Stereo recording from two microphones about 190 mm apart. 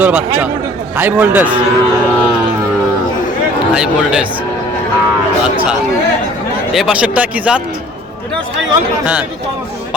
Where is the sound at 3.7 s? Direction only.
5° right (ahead or behind).